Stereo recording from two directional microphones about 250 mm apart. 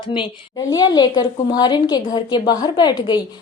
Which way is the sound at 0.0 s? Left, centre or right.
Centre.